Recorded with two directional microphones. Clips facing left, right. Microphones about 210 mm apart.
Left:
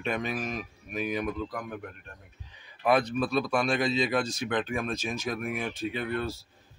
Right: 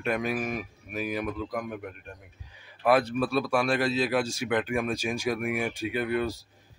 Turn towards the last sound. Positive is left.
turn(degrees=-10)  # may be behind; listen again after turning